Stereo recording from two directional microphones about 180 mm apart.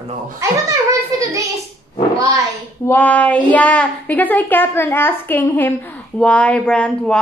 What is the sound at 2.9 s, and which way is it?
A child's voice, 10° left (ahead or behind).